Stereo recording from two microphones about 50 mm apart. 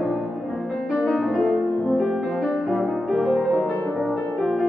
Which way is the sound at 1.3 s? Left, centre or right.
Left.